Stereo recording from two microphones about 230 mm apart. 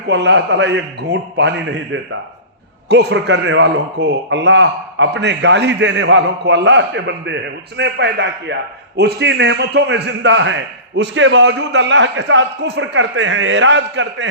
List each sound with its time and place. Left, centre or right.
0.1 s a man's voice: right